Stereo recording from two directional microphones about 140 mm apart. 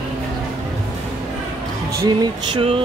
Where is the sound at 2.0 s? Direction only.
30° right (ahead or behind).